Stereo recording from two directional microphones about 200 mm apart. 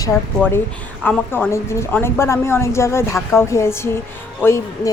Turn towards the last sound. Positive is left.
turn(degrees=15)  # may be behind; listen again after turning